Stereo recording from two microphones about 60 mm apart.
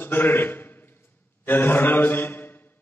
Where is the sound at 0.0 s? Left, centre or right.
Left.